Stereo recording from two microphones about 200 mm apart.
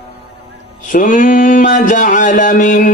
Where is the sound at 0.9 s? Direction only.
40° left (ahead or behind).